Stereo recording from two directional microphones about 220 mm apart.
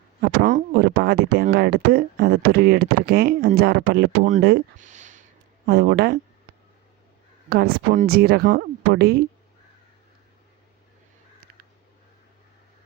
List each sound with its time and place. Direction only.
0.2 s speech: 40° right (ahead or behind)
4.4 s speech: 40° right (ahead or behind)
5.6 s speech: 45° right (ahead or behind)
7.5 s speech: 45° right (ahead or behind)